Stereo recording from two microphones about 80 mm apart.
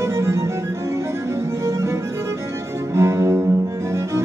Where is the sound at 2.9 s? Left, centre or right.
Right.